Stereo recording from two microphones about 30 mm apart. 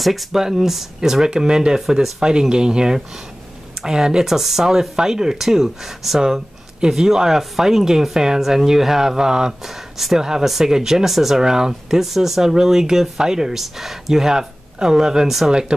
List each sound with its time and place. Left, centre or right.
0.0 s speech: centre
0.3 s speech: centre
1.8 s speech: centre
2.5 s speech: right
4.3 s speech: centre
12.0 s speech: centre
13.6 s speech: centre
15.2 s speech: centre